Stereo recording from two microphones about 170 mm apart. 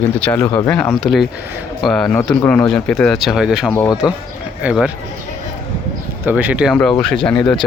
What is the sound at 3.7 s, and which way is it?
Speech, 10° left (ahead or behind).